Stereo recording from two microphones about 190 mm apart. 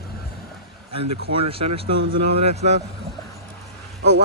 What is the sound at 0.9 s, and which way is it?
Speech, 30° right (ahead or behind).